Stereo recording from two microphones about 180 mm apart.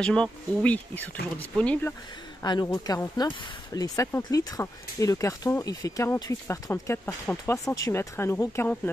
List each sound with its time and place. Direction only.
0.0 s speech: 5° left (ahead or behind)
2.4 s speech: 25° left (ahead or behind)